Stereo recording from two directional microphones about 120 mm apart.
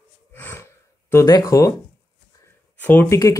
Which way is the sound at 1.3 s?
30° left (ahead or behind).